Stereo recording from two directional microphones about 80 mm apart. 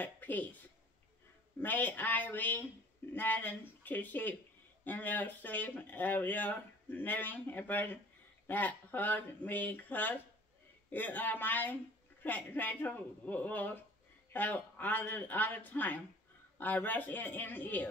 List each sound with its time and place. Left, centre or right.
0.0 s a woman's voice: left